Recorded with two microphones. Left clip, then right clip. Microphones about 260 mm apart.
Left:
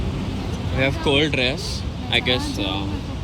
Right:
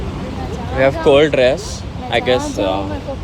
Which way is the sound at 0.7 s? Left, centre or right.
Centre.